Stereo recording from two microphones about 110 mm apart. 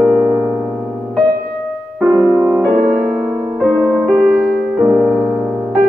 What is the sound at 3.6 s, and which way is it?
Music, 10° right (ahead or behind).